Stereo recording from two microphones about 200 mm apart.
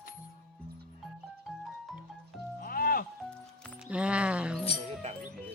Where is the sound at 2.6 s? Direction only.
45° left (ahead or behind).